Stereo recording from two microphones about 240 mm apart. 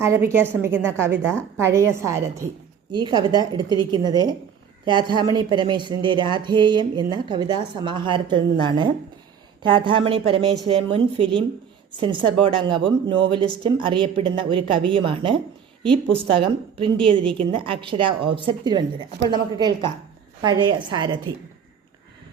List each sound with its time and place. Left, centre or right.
0.0 s a woman's voice: centre
17.3 s a woman's voice: right